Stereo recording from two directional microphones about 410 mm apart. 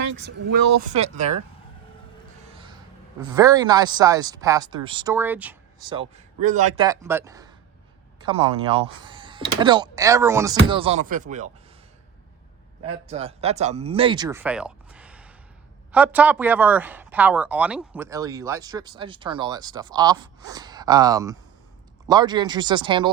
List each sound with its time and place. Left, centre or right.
0.1 s speech: right
0.5 s speech: right
0.8 s speech: centre
3.3 s speech: centre
12.8 s speech: centre